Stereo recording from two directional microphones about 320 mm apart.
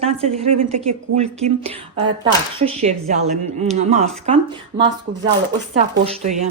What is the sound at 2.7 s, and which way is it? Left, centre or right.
Speech, right.